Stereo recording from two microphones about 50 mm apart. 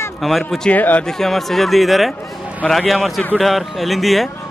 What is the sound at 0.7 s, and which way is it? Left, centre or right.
Speech, left.